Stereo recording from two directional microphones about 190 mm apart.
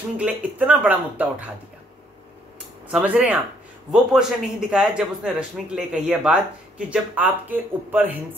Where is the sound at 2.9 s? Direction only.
5° right (ahead or behind).